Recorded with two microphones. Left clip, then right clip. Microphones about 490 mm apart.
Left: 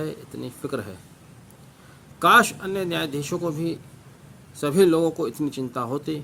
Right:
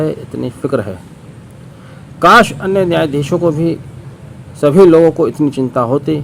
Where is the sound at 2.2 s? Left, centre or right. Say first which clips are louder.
Right 9 dB; left.